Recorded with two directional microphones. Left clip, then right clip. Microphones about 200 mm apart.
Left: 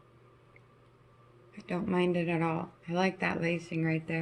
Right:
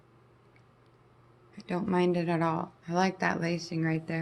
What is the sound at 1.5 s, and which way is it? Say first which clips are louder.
Speech: right 2 dB; 15° right (ahead or behind).